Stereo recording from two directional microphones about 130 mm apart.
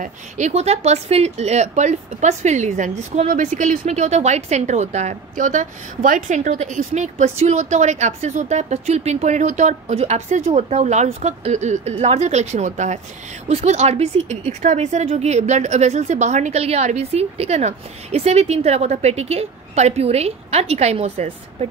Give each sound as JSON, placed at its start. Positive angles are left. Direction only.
{"t": 0.0, "sound": "speech", "side_deg": -60}
{"t": 13.5, "sound": "speech", "side_deg": -55}